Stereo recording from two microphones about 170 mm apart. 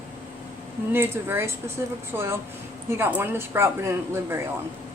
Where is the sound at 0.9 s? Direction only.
15° right (ahead or behind).